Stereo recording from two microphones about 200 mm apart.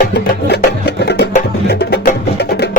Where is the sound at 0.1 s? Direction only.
55° left (ahead or behind).